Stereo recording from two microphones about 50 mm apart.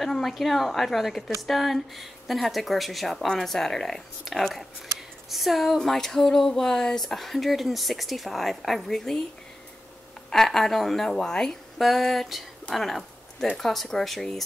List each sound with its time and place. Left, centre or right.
0.0 s speech: centre
5.8 s speech: centre
10.3 s speech: centre